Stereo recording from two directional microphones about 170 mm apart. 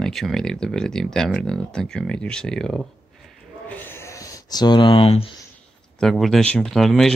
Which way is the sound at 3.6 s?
10° left (ahead or behind).